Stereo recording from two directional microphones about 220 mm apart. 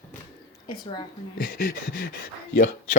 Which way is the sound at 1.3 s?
40° left (ahead or behind).